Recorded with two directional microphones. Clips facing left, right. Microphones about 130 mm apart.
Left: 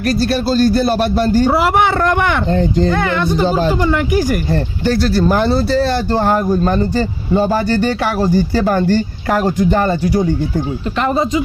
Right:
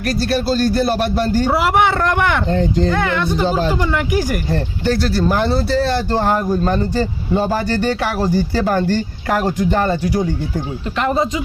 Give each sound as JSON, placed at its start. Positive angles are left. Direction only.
{"t": 0.3, "sound": "speech", "side_deg": 30}
{"t": 8.0, "sound": "speech", "side_deg": 30}